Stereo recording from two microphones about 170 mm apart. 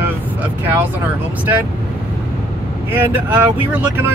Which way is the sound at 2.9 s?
10° right (ahead or behind).